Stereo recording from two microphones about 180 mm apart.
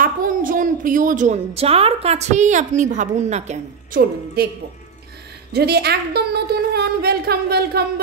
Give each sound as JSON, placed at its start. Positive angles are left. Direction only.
{"t": 0.0, "sound": "a woman's voice", "side_deg": -50}
{"t": 4.4, "sound": "a woman's voice", "side_deg": -60}